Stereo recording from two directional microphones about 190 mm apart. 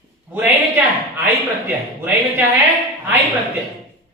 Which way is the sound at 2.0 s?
10° right (ahead or behind).